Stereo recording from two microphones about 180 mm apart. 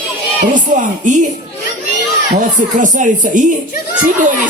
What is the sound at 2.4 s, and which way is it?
Speech, 45° right (ahead or behind).